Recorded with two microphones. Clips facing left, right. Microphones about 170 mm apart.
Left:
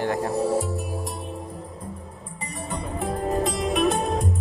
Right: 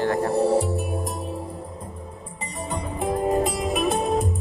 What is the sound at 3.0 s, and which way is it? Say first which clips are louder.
Music: right 3 dB; 15° right (ahead or behind).